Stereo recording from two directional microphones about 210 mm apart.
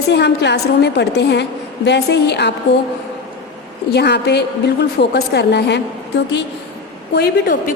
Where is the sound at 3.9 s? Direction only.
55° left (ahead or behind).